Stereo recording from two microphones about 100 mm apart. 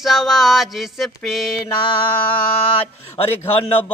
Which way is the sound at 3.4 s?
75° left (ahead or behind).